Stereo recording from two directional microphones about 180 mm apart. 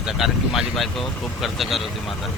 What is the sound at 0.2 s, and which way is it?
Speech, centre (ahead or behind).